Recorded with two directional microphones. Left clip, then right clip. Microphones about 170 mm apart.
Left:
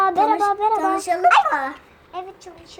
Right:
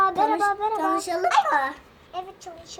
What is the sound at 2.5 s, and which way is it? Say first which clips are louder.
Speech: right 1 dB; 20° left (ahead or behind).